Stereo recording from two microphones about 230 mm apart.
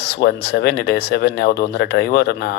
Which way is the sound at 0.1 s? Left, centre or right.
Left.